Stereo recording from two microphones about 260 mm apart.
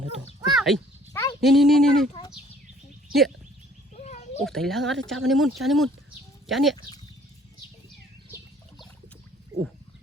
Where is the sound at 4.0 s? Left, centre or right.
Left.